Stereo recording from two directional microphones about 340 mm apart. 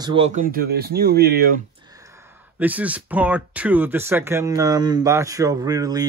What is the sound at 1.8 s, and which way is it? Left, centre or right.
Speech, centre.